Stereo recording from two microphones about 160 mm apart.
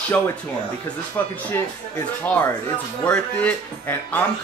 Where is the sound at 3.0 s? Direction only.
10° left (ahead or behind).